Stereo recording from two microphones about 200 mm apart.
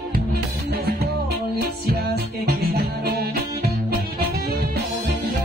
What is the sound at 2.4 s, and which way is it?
Music, 50° right (ahead or behind).